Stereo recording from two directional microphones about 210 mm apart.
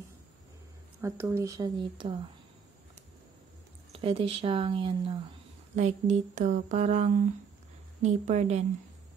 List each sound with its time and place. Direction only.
1.0 s speech: 10° right (ahead or behind)
3.9 s speech: 25° right (ahead or behind)